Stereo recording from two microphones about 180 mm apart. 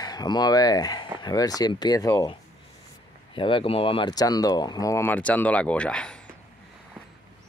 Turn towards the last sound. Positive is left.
turn(degrees=5)  # may be behind; listen again after turning